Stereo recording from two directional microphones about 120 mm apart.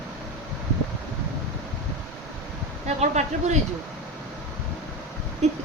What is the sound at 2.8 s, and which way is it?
Speech, 70° right (ahead or behind).